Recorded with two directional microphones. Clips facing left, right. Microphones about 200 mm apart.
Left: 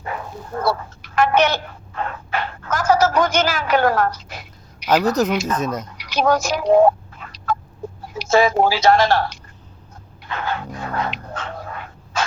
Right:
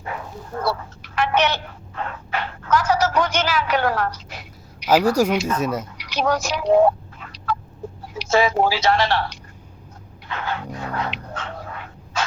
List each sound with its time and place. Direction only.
0.0 s dog: 45° left (ahead or behind)
4.9 s speech: 10° right (ahead or behind)
6.0 s a sound: 45° left (ahead or behind)
8.1 s speech: 45° left (ahead or behind)
10.2 s dog: 45° left (ahead or behind)